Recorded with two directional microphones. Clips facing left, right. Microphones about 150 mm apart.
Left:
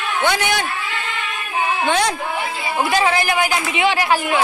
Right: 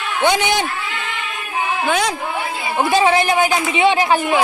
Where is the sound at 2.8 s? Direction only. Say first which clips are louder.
Right 3 dB; 20° right (ahead or behind).